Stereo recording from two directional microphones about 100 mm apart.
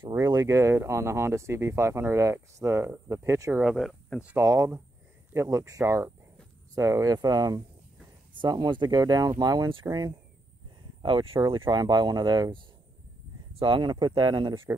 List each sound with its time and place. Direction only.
0.1 s speech: 40° right (ahead or behind)
3.6 s speech: centre (ahead or behind)
4.4 s speech: 25° right (ahead or behind)
11.0 s speech: 50° right (ahead or behind)
11.8 s speech: 45° right (ahead or behind)
13.6 s speech: 55° right (ahead or behind)